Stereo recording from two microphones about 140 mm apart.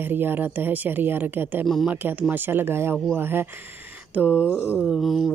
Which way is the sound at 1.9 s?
15° right (ahead or behind).